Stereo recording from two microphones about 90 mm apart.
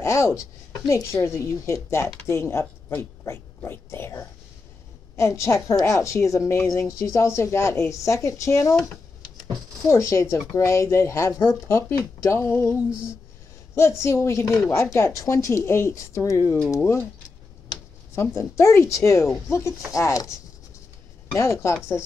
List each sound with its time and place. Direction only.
0.0 s a woman's voice: 30° left (ahead or behind)
9.8 s a woman's voice: 30° left (ahead or behind)
13.7 s a woman's voice: 30° left (ahead or behind)
18.1 s a woman's voice: 30° left (ahead or behind)
21.4 s a woman's voice: 30° left (ahead or behind)